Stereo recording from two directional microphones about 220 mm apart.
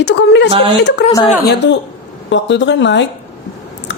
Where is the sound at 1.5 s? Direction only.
50° left (ahead or behind).